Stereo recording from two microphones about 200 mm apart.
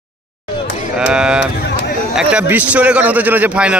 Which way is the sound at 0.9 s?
5° right (ahead or behind).